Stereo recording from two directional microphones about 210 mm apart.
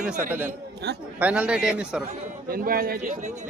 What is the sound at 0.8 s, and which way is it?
Speech, 55° right (ahead or behind).